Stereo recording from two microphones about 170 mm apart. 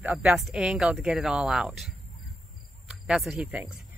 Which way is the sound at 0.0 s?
5° right (ahead or behind).